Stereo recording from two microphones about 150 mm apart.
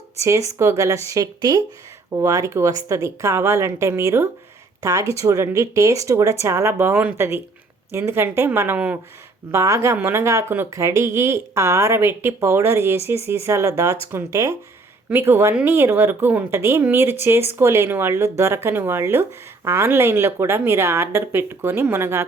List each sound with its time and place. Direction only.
0.2 s a woman's voice: 20° right (ahead or behind)